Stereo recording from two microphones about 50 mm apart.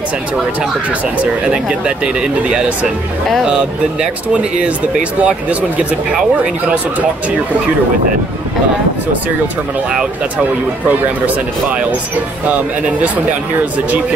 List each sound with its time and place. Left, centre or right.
1.2 s speech: centre
4.3 s speech: right
10.9 s speech: right